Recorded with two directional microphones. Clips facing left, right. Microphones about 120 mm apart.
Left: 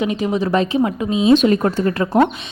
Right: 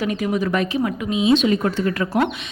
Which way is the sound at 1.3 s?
50° left (ahead or behind).